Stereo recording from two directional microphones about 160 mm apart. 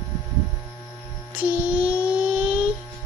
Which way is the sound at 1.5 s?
10° right (ahead or behind).